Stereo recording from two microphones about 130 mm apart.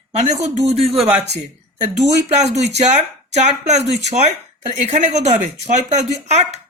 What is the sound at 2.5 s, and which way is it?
Speech, 60° right (ahead or behind).